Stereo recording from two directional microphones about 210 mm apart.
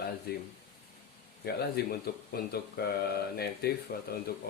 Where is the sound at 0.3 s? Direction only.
50° left (ahead or behind).